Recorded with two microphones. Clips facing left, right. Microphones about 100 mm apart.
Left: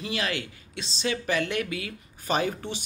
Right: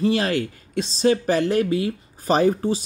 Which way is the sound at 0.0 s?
40° right (ahead or behind).